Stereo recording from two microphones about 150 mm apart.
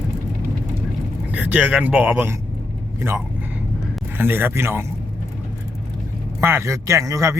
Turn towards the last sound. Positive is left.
turn(degrees=-20)  # may be behind; listen again after turning